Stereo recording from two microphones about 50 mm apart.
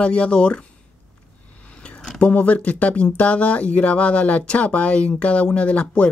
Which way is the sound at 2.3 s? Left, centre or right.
Left.